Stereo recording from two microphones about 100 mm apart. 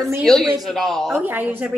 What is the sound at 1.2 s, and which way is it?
Speech, 20° right (ahead or behind).